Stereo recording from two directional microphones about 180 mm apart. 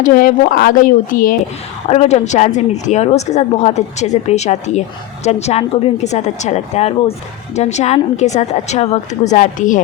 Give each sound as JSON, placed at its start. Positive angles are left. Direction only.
{"t": 0.0, "sound": "a woman's voice", "side_deg": 50}
{"t": 1.9, "sound": "a woman's voice", "side_deg": 40}